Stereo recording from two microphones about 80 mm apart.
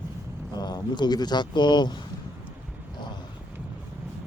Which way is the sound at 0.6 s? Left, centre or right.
Left.